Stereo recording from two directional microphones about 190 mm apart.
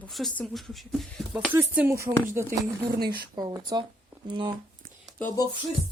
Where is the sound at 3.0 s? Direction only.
55° right (ahead or behind).